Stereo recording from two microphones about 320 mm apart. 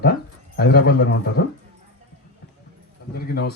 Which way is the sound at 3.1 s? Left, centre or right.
Left.